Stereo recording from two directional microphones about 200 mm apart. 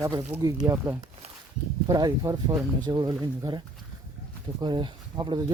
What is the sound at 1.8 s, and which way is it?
Speech, 20° right (ahead or behind).